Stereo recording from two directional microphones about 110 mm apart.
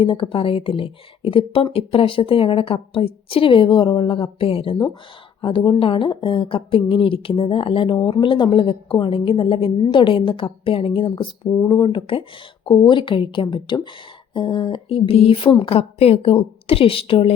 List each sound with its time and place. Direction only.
0.0 s a woman's voice: 55° left (ahead or behind)